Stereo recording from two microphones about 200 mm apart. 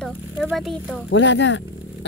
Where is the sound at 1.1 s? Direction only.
65° left (ahead or behind).